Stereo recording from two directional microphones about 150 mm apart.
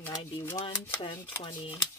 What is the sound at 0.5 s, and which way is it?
Speech, 35° left (ahead or behind).